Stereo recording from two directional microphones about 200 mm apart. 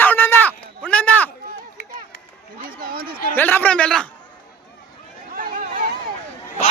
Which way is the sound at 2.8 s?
50° right (ahead or behind).